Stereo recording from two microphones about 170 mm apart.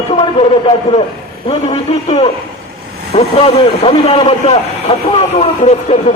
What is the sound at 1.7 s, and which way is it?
A man's voice, 35° left (ahead or behind).